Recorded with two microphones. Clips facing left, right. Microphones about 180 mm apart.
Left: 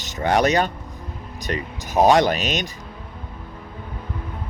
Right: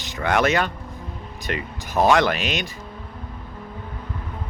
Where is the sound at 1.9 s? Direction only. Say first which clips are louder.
Left 2 dB; 20° left (ahead or behind).